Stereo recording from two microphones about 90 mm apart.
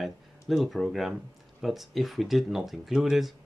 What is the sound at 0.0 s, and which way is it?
Speech, centre (ahead or behind).